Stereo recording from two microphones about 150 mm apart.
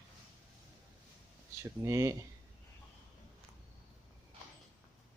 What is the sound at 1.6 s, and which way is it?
Speech, 20° right (ahead or behind).